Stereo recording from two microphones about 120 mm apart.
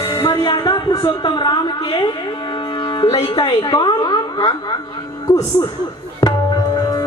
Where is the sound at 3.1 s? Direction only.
35° left (ahead or behind).